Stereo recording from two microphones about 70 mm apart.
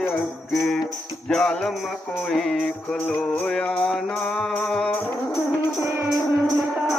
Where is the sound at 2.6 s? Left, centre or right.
Centre.